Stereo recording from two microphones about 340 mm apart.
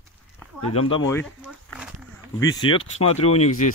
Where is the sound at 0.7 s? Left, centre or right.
Centre.